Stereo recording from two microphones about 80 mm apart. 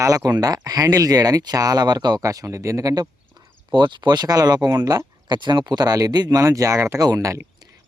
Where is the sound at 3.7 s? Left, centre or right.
Right.